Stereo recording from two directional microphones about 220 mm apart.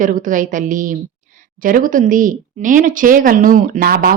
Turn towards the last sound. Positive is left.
turn(degrees=-45)  # may be behind; listen again after turning